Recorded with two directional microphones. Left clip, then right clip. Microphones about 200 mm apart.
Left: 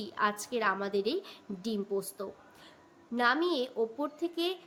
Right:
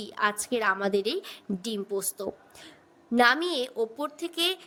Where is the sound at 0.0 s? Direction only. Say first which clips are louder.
Right 3 dB; 35° right (ahead or behind).